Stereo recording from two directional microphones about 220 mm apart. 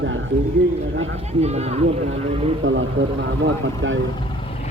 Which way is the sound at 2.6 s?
60° right (ahead or behind).